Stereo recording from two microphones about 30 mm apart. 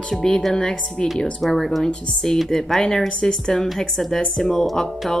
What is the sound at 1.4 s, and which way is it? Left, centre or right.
A woman's voice, centre.